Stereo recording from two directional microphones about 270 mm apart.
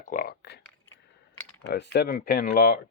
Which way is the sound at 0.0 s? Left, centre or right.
Left.